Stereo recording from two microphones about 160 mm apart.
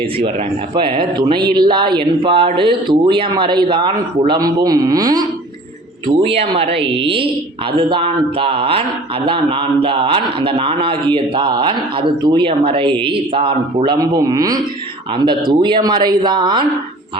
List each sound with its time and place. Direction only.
0.7 s a man's voice: 30° right (ahead or behind)